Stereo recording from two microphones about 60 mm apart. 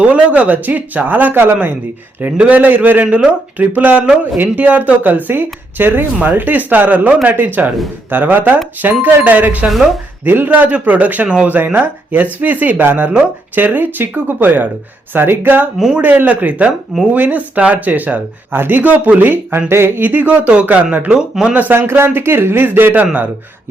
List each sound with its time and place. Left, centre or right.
0.0 s speech: right
9.6 s speech: centre
10.2 s speech: right
21.2 s speech: centre
21.5 s speech: right
21.8 s speech: right